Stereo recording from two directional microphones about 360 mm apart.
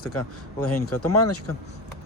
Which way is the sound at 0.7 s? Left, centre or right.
Left.